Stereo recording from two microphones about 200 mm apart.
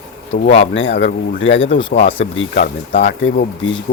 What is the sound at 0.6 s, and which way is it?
Speech, 70° left (ahead or behind).